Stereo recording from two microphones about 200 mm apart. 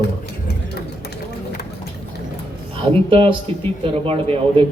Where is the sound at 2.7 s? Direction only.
25° right (ahead or behind).